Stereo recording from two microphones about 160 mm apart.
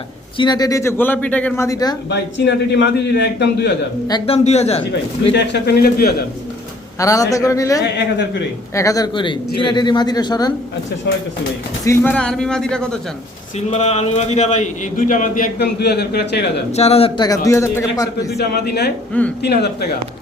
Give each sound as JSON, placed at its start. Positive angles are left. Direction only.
{"t": 0.3, "sound": "speech", "side_deg": 25}
{"t": 2.0, "sound": "a man's voice", "side_deg": 90}
{"t": 4.4, "sound": "speech", "side_deg": 40}
{"t": 5.3, "sound": "a man's voice", "side_deg": 90}
{"t": 7.0, "sound": "speech", "side_deg": 20}
{"t": 11.9, "sound": "a man's voice", "side_deg": 10}
{"t": 13.7, "sound": "a man's voice", "side_deg": 45}
{"t": 16.7, "sound": "speech", "side_deg": 40}
{"t": 17.2, "sound": "speech", "side_deg": 20}
{"t": 18.3, "sound": "a man's voice", "side_deg": 85}